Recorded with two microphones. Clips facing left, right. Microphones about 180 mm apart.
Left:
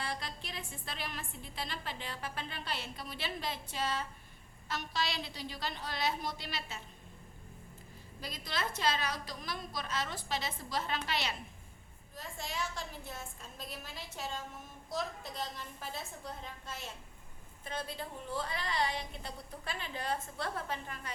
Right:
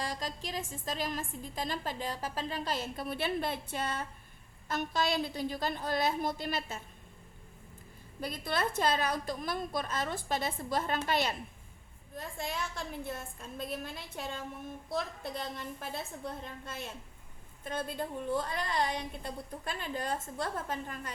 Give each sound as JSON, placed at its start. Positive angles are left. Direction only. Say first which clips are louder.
{"t": 0.0, "sound": "music", "louder": "right 4 dB", "side_deg": -40}
{"t": 0.7, "sound": "a woman's voice", "louder": "right 8 dB", "side_deg": -40}
{"t": 8.2, "sound": "a woman's voice", "louder": "right 6 dB", "side_deg": -55}